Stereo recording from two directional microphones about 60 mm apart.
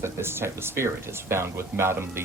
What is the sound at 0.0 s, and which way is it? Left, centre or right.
Speech, right.